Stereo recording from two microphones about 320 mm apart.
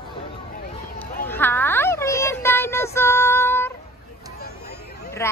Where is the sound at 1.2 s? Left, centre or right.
Centre.